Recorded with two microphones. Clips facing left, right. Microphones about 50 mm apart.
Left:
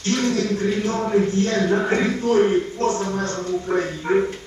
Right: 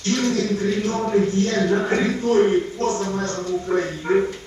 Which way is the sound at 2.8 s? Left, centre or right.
Left.